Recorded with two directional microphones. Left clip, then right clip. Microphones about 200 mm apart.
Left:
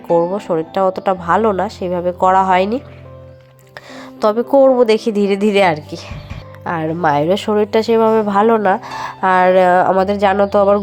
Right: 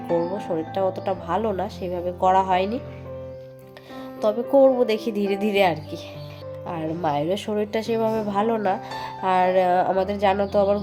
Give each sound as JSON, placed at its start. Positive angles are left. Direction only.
{"t": 0.2, "sound": "a woman's voice", "side_deg": 25}
{"t": 4.2, "sound": "a woman's voice", "side_deg": 30}